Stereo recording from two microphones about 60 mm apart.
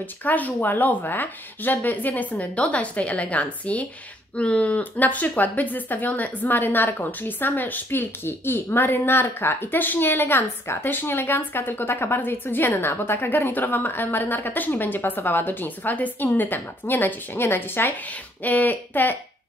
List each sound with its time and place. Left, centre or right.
0.0 s a woman's voice: left